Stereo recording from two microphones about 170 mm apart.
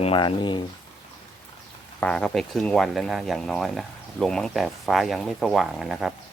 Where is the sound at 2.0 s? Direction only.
5° left (ahead or behind).